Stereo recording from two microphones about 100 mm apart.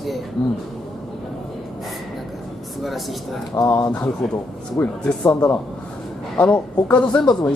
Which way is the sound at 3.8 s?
10° left (ahead or behind).